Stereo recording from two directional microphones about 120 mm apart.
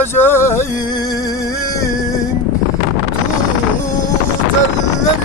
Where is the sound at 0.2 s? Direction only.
20° left (ahead or behind).